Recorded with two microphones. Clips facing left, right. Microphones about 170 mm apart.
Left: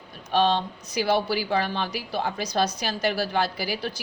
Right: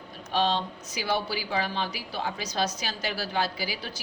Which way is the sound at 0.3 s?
60° left (ahead or behind).